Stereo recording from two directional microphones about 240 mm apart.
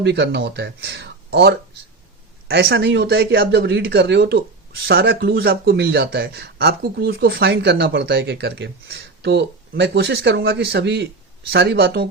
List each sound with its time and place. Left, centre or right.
0.0 s speech: right